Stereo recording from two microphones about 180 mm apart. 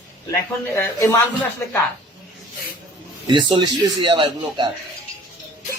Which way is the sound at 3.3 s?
25° right (ahead or behind).